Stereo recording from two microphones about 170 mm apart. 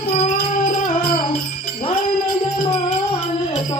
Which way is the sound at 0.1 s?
40° left (ahead or behind).